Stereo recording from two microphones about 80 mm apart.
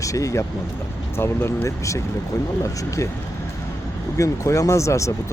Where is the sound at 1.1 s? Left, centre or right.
Left.